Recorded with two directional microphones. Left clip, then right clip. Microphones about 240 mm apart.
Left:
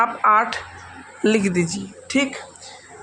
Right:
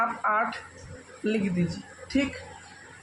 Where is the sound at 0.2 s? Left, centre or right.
Left.